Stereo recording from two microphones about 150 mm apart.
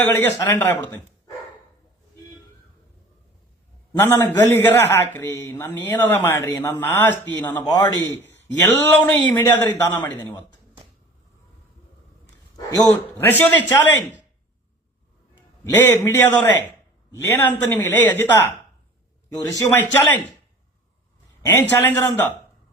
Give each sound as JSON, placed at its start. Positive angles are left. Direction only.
{"t": 0.0, "sound": "a man's voice", "side_deg": 15}
{"t": 4.0, "sound": "a man's voice", "side_deg": 15}
{"t": 7.6, "sound": "a man's voice", "side_deg": 30}
{"t": 8.0, "sound": "a man's voice", "side_deg": 15}
{"t": 12.2, "sound": "a sound", "side_deg": 25}
{"t": 13.1, "sound": "a man's voice", "side_deg": 15}
{"t": 15.8, "sound": "a man's voice", "side_deg": 15}
{"t": 19.5, "sound": "a man's voice", "side_deg": 15}
{"t": 21.5, "sound": "a man's voice", "side_deg": 15}